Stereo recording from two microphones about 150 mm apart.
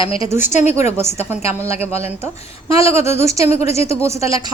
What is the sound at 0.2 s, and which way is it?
A woman's voice, 15° right (ahead or behind).